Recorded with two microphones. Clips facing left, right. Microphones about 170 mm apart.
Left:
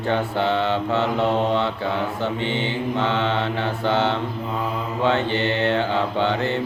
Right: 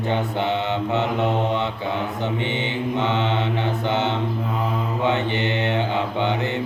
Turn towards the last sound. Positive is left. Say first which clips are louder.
# left 1 dB
turn(degrees=-20)  # may be behind; listen again after turning